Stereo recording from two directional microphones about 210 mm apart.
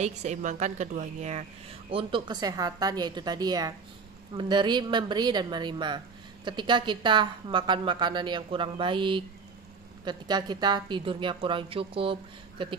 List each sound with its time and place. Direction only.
0.0 s a woman's voice: 35° right (ahead or behind)